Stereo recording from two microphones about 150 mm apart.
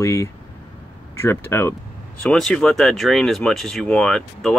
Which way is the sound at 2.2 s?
5° left (ahead or behind).